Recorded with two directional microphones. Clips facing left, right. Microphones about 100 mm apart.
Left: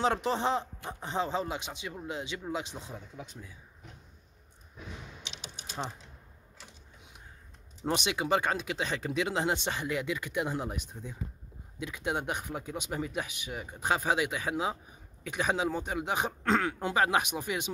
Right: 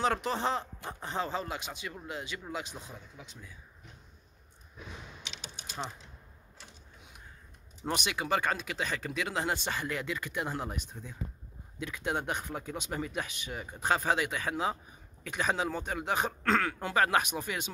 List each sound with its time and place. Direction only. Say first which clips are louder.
0.0 s speech: left 2 dB; 25° left (ahead or behind)
7.8 s speech: left 3 dB; 25° left (ahead or behind)